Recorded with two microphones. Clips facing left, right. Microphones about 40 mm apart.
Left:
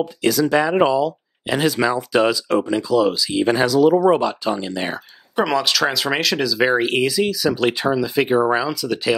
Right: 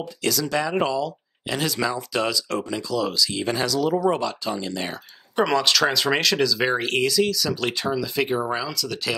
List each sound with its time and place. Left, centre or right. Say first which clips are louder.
0.2 s speech: left 6 dB; left
5.3 s speech: left 1 dB; centre